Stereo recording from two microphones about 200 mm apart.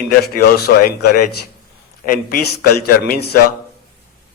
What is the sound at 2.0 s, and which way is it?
A man's voice, 45° left (ahead or behind).